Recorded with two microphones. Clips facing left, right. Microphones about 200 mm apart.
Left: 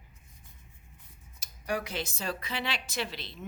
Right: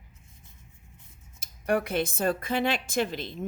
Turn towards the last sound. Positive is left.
turn(degrees=-50)  # may be behind; listen again after turning